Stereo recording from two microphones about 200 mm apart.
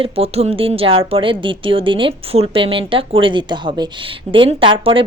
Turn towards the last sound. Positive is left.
turn(degrees=-25)  # may be behind; listen again after turning